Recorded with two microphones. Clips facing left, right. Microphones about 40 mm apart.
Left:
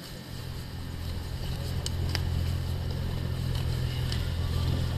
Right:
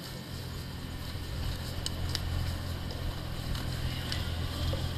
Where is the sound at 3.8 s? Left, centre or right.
Centre.